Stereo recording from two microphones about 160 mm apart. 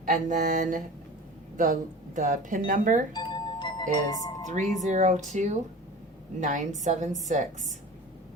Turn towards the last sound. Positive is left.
turn(degrees=-50)  # may be behind; listen again after turning